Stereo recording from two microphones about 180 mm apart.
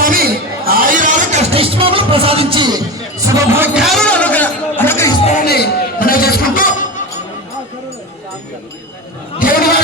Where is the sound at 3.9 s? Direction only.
5° left (ahead or behind).